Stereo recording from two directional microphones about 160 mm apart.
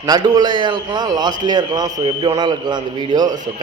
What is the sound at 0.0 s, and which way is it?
A man's voice, 25° right (ahead or behind).